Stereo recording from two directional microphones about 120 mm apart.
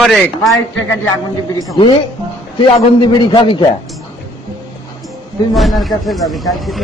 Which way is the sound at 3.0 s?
40° left (ahead or behind).